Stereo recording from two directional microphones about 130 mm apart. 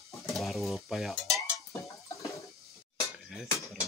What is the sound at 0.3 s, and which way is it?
Stir, centre (ahead or behind).